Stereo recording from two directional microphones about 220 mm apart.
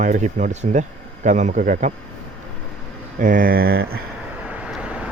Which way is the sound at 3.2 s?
40° right (ahead or behind).